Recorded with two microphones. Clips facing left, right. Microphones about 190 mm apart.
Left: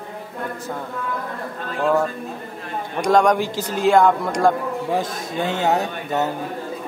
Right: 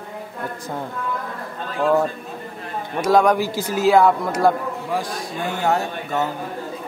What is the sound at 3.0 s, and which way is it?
A man's voice, 5° right (ahead or behind).